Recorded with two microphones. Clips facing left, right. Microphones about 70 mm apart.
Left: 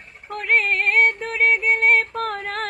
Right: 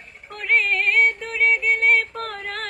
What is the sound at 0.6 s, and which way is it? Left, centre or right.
Music, left.